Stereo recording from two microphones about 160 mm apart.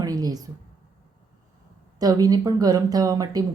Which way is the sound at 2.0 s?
25° right (ahead or behind).